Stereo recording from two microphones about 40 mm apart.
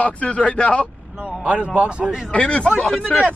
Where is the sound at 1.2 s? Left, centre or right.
Right.